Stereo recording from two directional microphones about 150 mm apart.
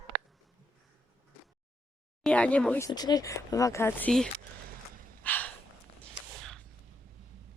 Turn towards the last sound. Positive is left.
turn(degrees=5)  # may be behind; listen again after turning